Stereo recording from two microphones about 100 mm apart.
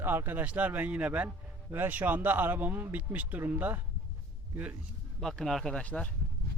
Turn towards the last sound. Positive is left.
turn(degrees=15)  # may be behind; listen again after turning